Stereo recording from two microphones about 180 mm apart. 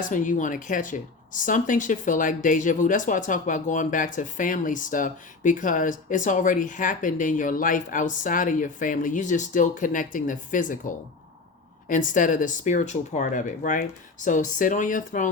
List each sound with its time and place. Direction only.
0.1 s speech: 45° left (ahead or behind)
11.9 s speech: 45° left (ahead or behind)